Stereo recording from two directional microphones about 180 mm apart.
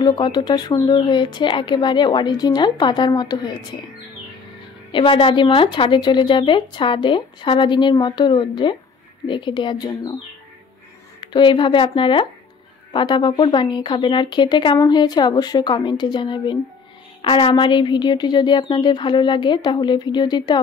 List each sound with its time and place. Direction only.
0.0 s speech: 25° left (ahead or behind)
4.9 s speech: 30° left (ahead or behind)